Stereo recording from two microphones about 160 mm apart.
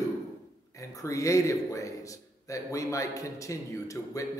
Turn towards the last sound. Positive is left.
turn(degrees=20)  # may be behind; listen again after turning